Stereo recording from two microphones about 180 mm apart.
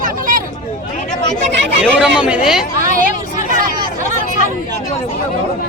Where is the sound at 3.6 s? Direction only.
45° right (ahead or behind).